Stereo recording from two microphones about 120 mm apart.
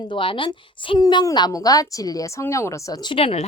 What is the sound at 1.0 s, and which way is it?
Speech, 30° left (ahead or behind).